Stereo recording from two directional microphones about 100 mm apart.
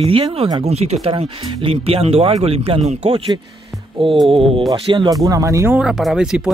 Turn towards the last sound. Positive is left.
turn(degrees=-5)  # may be behind; listen again after turning